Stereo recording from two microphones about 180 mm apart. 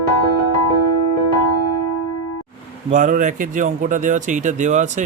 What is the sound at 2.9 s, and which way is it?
Speech, 45° right (ahead or behind).